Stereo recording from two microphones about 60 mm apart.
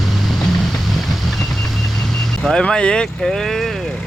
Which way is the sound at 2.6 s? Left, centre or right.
Centre.